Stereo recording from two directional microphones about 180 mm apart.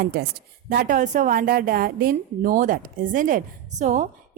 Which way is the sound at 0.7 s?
50° right (ahead or behind).